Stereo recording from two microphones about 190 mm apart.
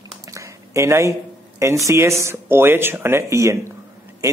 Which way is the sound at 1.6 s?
15° right (ahead or behind).